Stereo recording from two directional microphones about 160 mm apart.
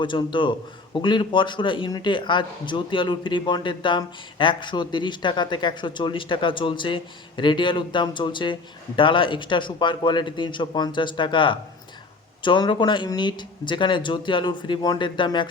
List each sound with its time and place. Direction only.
0.0 s a man's voice: 30° left (ahead or behind)